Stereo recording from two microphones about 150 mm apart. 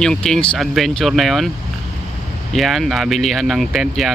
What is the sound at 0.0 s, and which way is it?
Speech, 5° left (ahead or behind).